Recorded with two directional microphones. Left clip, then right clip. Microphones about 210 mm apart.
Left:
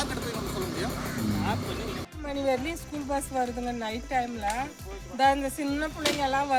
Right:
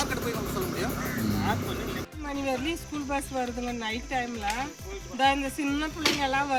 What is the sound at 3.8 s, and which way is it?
Speech, 20° left (ahead or behind).